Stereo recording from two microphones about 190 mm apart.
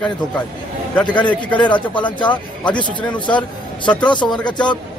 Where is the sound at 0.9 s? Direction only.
5° left (ahead or behind).